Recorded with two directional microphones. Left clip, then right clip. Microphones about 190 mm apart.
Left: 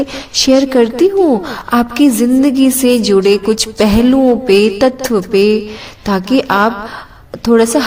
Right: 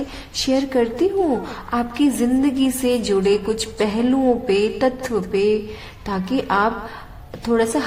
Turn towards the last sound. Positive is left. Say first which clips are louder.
# left 9 dB
turn(degrees=35)  # may be behind; listen again after turning